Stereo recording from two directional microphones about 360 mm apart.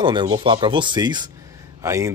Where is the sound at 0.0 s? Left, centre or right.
Centre.